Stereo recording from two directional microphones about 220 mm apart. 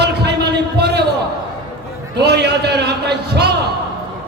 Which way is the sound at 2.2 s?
50° right (ahead or behind).